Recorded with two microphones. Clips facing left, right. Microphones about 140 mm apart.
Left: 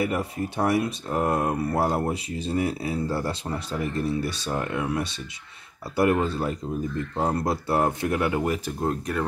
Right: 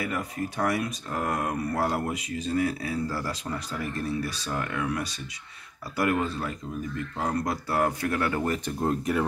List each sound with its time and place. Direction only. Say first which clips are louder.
0.0 s speech: left 4 dB; 30° left (ahead or behind); by 9.2 s centre (ahead or behind)